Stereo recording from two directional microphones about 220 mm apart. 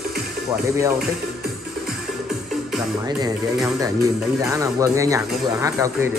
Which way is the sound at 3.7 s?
15° right (ahead or behind).